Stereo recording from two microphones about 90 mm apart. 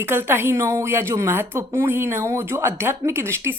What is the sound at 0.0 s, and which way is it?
Speech, 25° right (ahead or behind).